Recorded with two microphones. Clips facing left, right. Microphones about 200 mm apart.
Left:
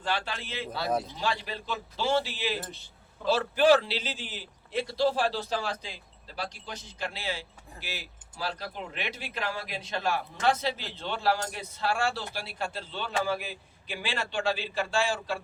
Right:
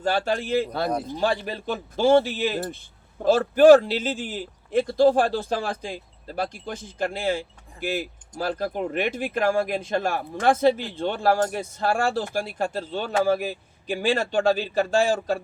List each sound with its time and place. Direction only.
0.0 s a man's voice: 45° right (ahead or behind)